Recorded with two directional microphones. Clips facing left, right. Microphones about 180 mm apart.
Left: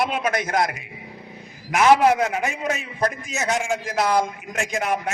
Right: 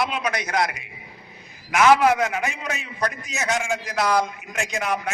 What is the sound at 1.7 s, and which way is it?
A man's voice, 35° left (ahead or behind).